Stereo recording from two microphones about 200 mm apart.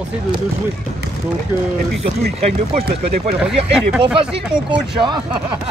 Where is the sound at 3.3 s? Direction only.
5° right (ahead or behind).